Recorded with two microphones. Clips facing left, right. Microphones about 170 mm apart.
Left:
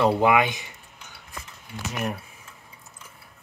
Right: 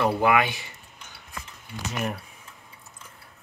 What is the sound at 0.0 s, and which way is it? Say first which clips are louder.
Speech: left 2 dB; 20° left (ahead or behind).